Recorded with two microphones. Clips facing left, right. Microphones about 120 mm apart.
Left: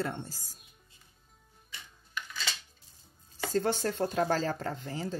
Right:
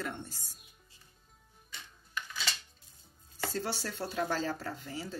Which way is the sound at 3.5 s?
45° left (ahead or behind).